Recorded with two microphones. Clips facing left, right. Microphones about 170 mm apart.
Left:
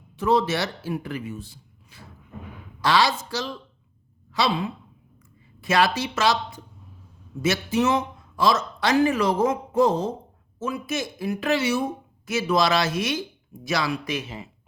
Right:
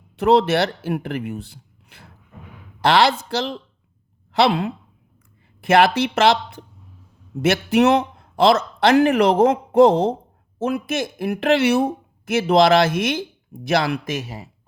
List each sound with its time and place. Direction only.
0.2 s a woman's voice: 65° right (ahead or behind); by 14.5 s 40° right (ahead or behind)